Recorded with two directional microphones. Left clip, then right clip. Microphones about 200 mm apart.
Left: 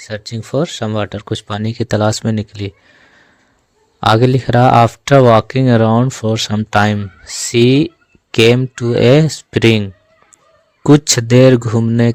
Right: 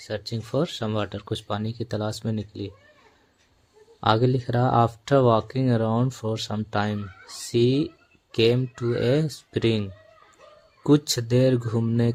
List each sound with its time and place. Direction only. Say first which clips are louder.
0.0 s speech: left 6 dB; 40° left (ahead or behind)
4.0 s speech: left 10 dB; 45° left (ahead or behind)